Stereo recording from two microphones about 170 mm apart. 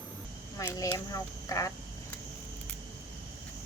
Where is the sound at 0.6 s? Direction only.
20° left (ahead or behind).